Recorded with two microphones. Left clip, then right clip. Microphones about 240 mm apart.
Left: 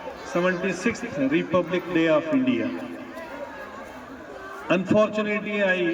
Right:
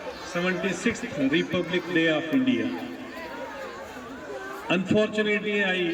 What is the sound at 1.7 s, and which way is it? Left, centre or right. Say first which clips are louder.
Speech: even; centre.